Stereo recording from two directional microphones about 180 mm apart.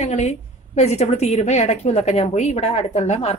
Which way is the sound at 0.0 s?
35° left (ahead or behind).